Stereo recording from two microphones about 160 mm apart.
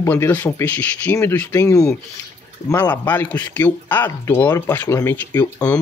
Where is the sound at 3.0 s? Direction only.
10° left (ahead or behind).